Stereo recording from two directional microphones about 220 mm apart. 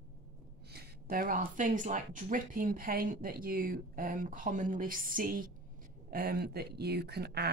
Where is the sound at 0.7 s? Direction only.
45° right (ahead or behind).